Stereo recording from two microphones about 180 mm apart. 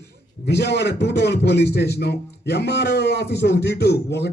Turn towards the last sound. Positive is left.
turn(degrees=70)  # may be behind; listen again after turning